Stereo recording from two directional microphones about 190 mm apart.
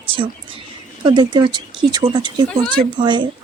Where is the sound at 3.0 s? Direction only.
25° right (ahead or behind).